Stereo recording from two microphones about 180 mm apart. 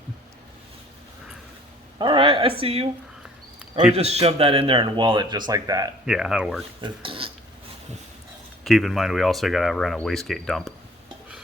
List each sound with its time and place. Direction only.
2.0 s a woman's voice: 30° right (ahead or behind)
3.9 s speech: 35° right (ahead or behind); by 5.9 s 20° right (ahead or behind)
6.1 s speech: 5° right (ahead or behind)
6.8 s speech: 30° right (ahead or behind)
8.6 s speech: centre (ahead or behind)